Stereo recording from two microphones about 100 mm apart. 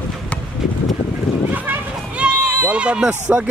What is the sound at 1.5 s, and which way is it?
Speech, 15° right (ahead or behind).